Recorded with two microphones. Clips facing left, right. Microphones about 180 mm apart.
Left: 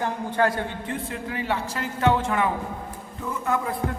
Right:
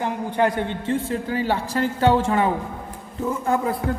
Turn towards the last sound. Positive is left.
turn(degrees=-30)  # may be behind; listen again after turning